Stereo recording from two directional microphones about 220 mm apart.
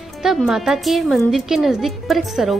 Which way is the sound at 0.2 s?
Centre (ahead or behind).